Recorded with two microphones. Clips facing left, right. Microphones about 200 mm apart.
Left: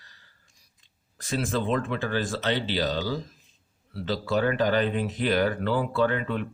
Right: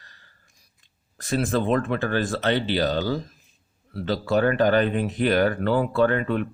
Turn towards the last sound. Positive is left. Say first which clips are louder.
# right 4 dB
turn(degrees=-50)  # may be behind; listen again after turning